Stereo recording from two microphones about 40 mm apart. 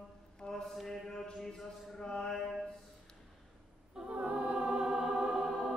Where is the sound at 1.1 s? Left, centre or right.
Centre.